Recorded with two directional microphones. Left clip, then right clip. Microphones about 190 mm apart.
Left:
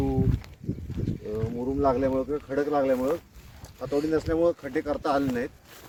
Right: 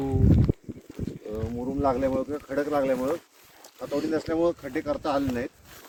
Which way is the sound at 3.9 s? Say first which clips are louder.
Left 2 dB; centre (ahead or behind).